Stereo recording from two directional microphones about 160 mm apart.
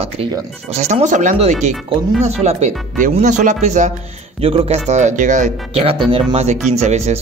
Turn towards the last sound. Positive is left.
turn(degrees=-45)  # may be behind; listen again after turning